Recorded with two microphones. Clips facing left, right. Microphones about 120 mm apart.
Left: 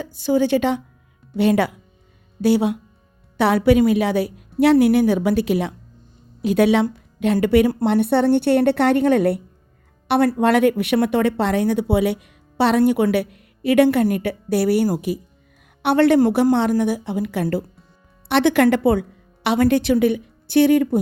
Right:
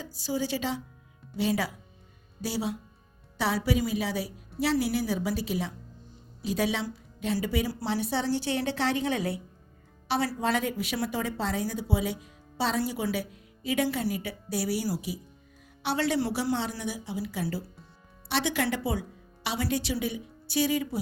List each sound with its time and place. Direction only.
0.0 s a woman's voice: 60° left (ahead or behind)